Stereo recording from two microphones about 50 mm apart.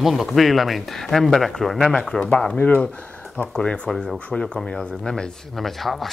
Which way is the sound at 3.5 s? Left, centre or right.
Centre.